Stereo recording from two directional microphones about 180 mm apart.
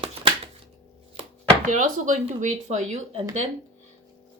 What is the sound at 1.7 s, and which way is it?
Speech, 45° right (ahead or behind).